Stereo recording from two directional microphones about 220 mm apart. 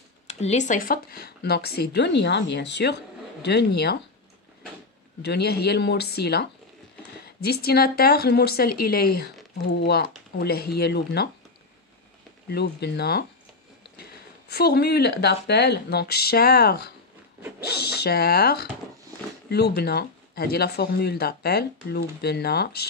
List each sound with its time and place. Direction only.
0.3 s speech: 30° left (ahead or behind); by 4.0 s 50° left (ahead or behind)
5.2 s speech: 50° left (ahead or behind)
10.4 s speech: 45° left (ahead or behind)
12.4 s speech: 50° left (ahead or behind)
14.5 s speech: 45° left (ahead or behind)